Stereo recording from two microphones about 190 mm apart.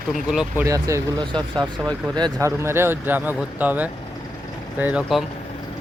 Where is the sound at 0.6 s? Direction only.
15° right (ahead or behind).